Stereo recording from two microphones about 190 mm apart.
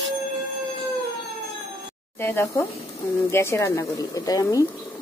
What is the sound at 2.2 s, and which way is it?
Speech, 10° left (ahead or behind).